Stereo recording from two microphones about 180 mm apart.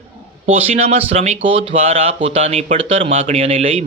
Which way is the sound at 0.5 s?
35° right (ahead or behind).